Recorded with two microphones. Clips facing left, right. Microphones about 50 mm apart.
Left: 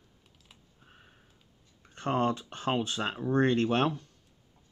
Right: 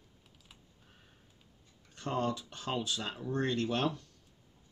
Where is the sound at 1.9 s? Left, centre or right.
Left.